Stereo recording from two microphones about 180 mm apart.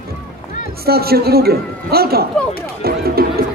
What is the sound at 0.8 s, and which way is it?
A man's voice, 60° right (ahead or behind).